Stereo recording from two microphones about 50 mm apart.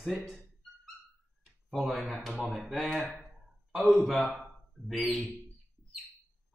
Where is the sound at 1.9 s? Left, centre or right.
Centre.